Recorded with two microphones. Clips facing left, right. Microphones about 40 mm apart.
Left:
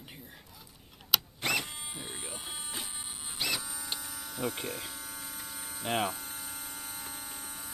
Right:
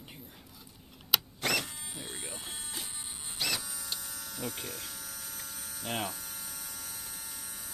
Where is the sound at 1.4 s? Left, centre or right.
Centre.